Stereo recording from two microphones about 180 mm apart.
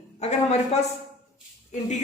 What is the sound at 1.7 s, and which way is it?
Speech, 40° left (ahead or behind).